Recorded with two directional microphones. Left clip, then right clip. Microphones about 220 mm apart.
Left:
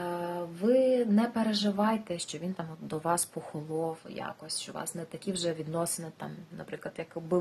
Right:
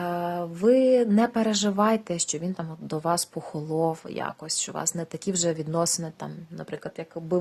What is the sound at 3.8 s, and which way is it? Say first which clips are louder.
Speech: right 8 dB; 45° right (ahead or behind).